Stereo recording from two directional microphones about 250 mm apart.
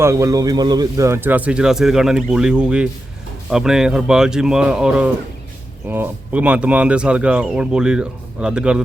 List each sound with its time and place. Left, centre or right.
0.0 s speech: centre